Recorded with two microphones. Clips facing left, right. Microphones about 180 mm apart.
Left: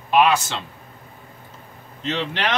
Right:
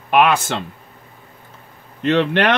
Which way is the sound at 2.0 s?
60° right (ahead or behind).